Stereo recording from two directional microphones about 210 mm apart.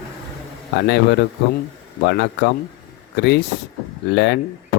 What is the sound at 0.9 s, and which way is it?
Speech, 60° left (ahead or behind).